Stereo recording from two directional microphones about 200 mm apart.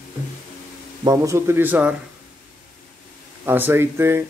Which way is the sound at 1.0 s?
15° right (ahead or behind).